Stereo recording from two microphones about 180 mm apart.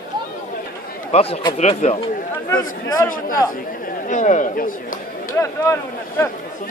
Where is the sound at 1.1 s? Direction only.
35° left (ahead or behind).